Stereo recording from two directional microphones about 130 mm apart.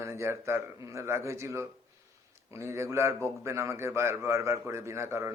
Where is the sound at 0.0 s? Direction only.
20° right (ahead or behind).